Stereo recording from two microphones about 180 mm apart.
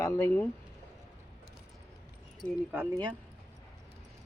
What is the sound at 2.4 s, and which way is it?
Speech, 5° left (ahead or behind).